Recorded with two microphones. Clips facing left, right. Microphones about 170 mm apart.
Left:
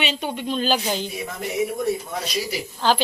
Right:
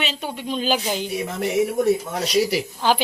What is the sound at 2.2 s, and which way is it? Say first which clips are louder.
Speech: right 7 dB; 75° right (ahead or behind).